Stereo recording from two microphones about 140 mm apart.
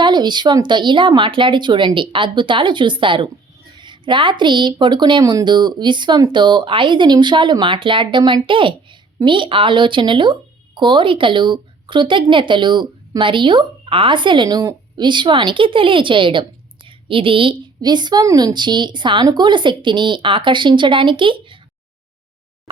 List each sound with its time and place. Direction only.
0.0 s a woman's voice: 30° right (ahead or behind)